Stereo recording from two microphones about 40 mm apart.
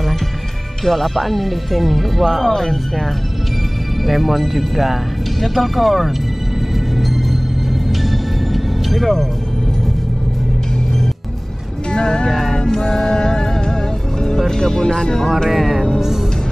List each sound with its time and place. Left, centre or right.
0.8 s speech: centre
8.9 s speech: centre
11.9 s music: centre
12.6 s speech: centre
13.1 s music: centre
14.2 s speech: centre
15.5 s speech: centre